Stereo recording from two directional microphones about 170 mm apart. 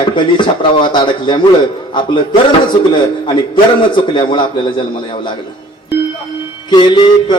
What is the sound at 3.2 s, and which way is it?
A man's voice, 30° left (ahead or behind).